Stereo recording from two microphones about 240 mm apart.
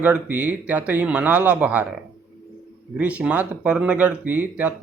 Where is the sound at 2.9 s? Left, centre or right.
Centre.